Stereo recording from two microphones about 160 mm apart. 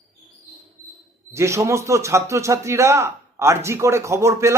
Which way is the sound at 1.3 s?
15° right (ahead or behind).